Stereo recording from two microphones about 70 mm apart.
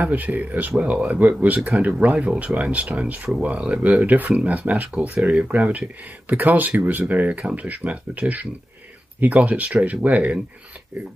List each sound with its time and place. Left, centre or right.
0.0 s speech: right